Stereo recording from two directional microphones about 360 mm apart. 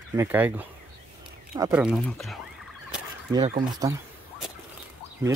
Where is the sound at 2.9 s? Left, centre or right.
Centre.